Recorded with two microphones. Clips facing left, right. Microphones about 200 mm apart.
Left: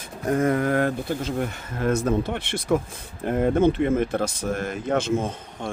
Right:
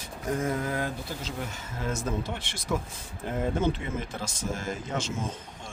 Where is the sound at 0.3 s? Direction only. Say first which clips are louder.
Left 8 dB; 65° left (ahead or behind).